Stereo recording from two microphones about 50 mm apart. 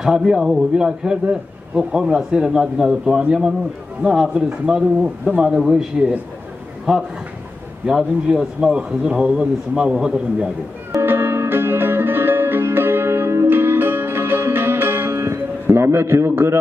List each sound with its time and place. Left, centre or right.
0.0 s a man's voice: centre
8.4 s a man's voice: centre
11.0 s music: right